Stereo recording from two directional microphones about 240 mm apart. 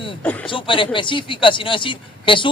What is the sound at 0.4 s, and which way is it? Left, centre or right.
A man's voice, left.